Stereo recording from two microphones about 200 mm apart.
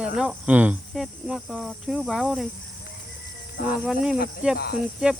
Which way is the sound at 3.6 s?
45° left (ahead or behind).